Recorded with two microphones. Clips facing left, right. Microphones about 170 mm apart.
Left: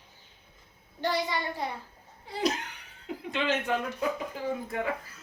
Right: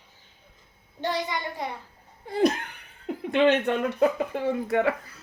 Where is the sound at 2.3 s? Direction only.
55° right (ahead or behind).